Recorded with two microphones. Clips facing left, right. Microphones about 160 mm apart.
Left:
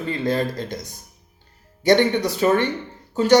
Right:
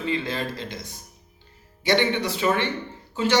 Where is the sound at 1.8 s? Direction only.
45° left (ahead or behind).